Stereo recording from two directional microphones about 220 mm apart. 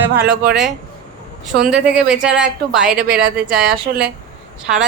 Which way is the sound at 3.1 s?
45° right (ahead or behind).